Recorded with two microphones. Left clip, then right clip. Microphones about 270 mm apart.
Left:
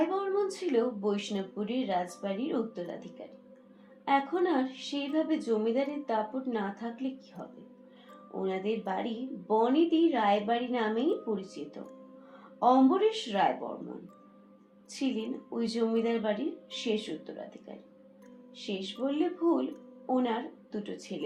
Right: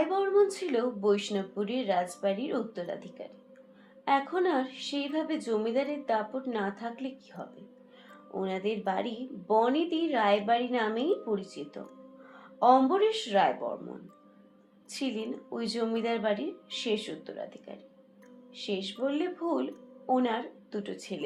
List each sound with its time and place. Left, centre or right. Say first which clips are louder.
0.4 s a woman's voice: even; right
14.9 s a woman's voice: even; right